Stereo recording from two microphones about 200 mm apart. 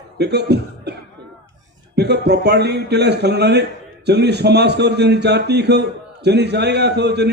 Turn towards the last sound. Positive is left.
turn(degrees=-55)  # may be behind; listen again after turning